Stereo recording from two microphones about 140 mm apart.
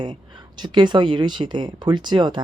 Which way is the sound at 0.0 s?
30° right (ahead or behind).